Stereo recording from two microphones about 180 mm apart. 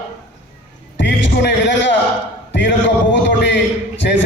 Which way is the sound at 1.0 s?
80° left.